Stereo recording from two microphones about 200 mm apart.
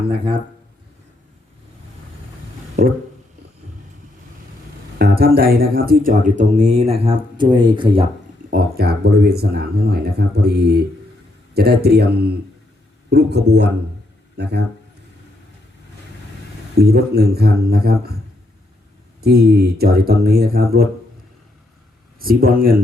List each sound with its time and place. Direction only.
4.9 s speech: 50° right (ahead or behind); by 8.0 s 25° right (ahead or behind)
8.4 s a man's voice: 50° right (ahead or behind)
16.7 s speech: 50° right (ahead or behind)
19.2 s speech: 50° right (ahead or behind)
22.2 s speech: 45° right (ahead or behind)